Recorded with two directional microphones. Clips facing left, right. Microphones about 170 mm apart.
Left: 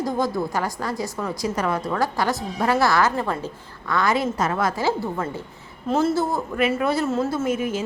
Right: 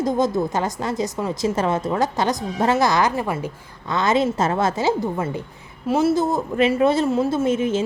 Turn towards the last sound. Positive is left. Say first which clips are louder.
# right 4 dB
turn(degrees=-25)  # may be behind; listen again after turning